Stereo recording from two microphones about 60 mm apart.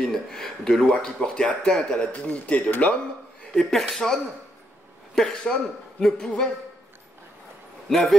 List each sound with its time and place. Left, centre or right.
0.0 s a man's voice: centre; by 3.0 s left
3.5 s speech: centre
7.9 s speech: centre